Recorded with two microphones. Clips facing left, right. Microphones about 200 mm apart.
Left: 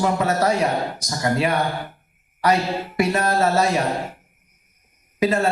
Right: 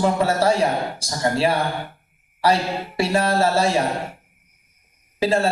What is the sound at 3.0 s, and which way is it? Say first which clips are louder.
Speech: even; 30° right (ahead or behind).